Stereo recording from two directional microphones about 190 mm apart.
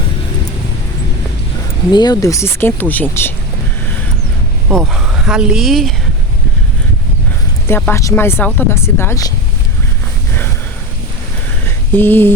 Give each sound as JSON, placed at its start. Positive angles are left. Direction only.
{"t": 1.9, "sound": "speech", "side_deg": 20}
{"t": 4.9, "sound": "a woman's voice", "side_deg": 0}
{"t": 7.7, "sound": "speech", "side_deg": 10}
{"t": 11.9, "sound": "speech", "side_deg": 10}